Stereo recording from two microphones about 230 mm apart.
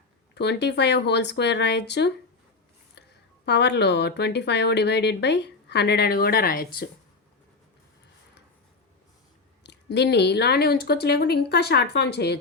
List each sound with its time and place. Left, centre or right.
0.3 s speech: left
3.4 s speech: left
9.6 s speech: left